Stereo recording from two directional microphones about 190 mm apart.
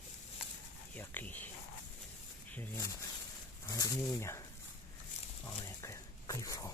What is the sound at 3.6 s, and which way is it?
Speech, 20° left (ahead or behind).